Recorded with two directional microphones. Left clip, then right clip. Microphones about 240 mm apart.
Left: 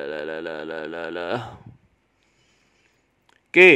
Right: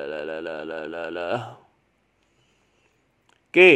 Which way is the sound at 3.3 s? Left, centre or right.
Centre.